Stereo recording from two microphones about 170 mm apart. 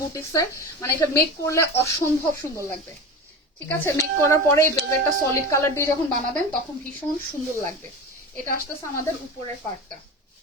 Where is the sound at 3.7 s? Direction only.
15° left (ahead or behind).